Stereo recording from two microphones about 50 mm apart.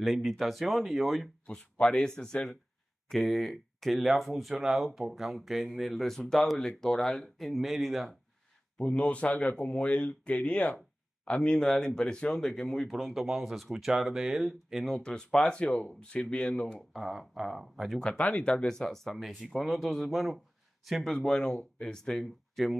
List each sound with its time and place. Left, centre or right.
0.0 s speech: centre
3.1 s speech: centre
8.7 s speech: left
9.6 s speech: centre
11.6 s speech: centre
12.9 s speech: centre
15.0 s speech: centre
16.9 s speech: centre
17.9 s speech: centre
18.2 s speech: left
18.7 s speech: centre
22.2 s speech: centre